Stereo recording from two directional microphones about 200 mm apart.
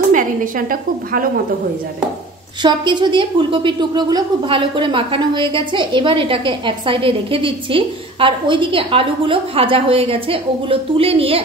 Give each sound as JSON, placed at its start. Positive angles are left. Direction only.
{"t": 0.1, "sound": "a woman's voice", "side_deg": -40}
{"t": 2.6, "sound": "a woman's voice", "side_deg": -20}